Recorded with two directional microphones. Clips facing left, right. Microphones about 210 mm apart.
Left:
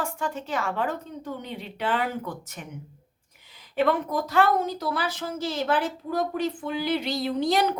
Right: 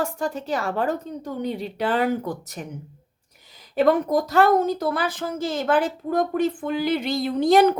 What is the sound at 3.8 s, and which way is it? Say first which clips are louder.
Speech: right 5 dB; 40° right (ahead or behind).